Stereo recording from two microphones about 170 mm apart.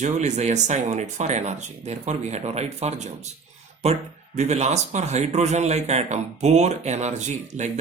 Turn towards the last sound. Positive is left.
turn(degrees=-45)  # may be behind; listen again after turning